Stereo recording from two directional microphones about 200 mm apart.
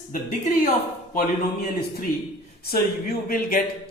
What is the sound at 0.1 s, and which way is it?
Speech, 40° left (ahead or behind).